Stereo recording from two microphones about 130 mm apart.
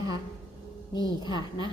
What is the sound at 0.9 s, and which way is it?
Speech, 35° left (ahead or behind).